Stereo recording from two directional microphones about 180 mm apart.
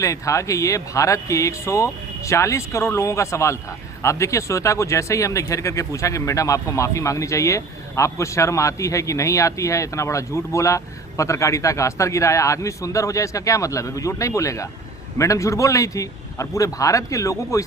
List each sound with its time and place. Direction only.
0.0 s speech: 15° left (ahead or behind)